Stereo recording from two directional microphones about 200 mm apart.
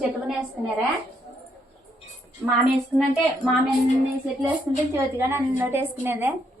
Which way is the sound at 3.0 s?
Centre (ahead or behind).